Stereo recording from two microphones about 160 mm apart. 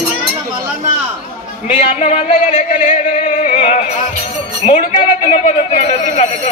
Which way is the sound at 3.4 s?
45° left (ahead or behind).